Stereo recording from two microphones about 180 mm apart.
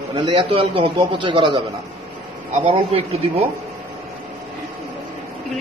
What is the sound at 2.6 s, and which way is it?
Speech, 35° right (ahead or behind).